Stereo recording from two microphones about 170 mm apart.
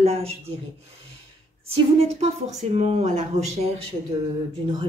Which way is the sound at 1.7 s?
35° right (ahead or behind).